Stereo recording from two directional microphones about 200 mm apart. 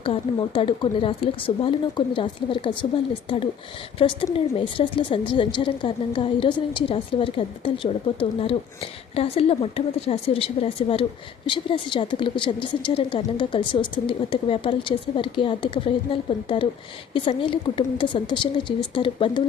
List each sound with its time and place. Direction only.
0.0 s a woman's voice: 25° left (ahead or behind)
4.0 s a woman's voice: 25° left (ahead or behind)
17.2 s a woman's voice: 25° left (ahead or behind)